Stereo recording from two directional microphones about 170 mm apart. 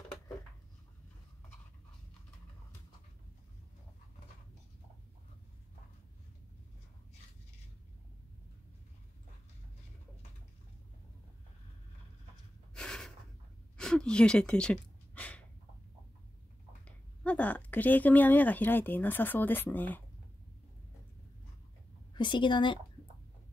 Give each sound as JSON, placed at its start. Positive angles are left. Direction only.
{"t": 12.7, "sound": "snort", "side_deg": 5}
{"t": 13.7, "sound": "a sound", "side_deg": 5}
{"t": 16.8, "sound": "speech", "side_deg": 10}
{"t": 22.1, "sound": "a woman's voice", "side_deg": 30}